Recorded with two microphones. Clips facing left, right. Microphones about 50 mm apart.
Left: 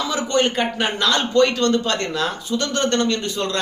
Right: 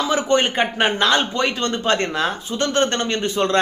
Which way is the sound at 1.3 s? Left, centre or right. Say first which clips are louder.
Left 5 dB; centre.